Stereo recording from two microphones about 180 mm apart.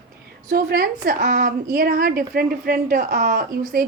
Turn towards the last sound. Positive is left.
turn(degrees=-50)  # may be behind; listen again after turning